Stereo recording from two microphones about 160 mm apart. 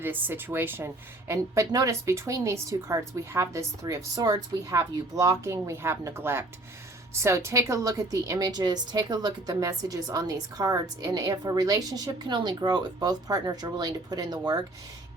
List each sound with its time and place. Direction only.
0.0 s a woman's voice: 10° right (ahead or behind)